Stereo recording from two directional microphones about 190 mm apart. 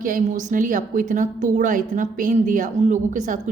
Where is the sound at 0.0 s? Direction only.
45° right (ahead or behind).